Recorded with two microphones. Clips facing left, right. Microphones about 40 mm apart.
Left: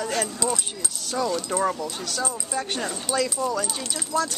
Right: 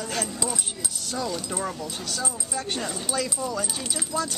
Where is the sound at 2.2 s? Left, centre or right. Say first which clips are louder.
Left 4 dB; centre.